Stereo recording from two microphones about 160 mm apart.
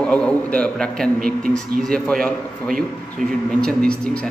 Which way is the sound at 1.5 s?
5° left (ahead or behind).